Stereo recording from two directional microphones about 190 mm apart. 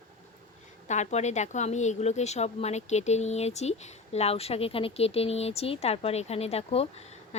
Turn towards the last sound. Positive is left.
turn(degrees=35)  # may be behind; listen again after turning